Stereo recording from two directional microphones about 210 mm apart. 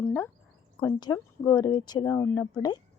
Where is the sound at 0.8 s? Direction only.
20° left (ahead or behind).